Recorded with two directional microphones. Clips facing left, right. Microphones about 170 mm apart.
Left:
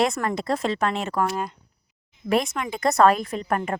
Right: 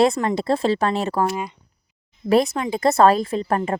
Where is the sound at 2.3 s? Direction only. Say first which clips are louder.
Right 5 dB; 30° right (ahead or behind).